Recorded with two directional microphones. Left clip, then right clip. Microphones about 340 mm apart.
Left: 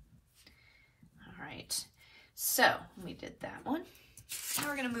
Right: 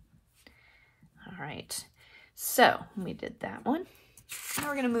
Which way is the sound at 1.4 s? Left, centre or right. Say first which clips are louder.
Right 2 dB; right.